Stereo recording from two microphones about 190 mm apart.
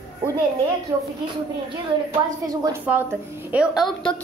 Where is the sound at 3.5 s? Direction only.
5° right (ahead or behind).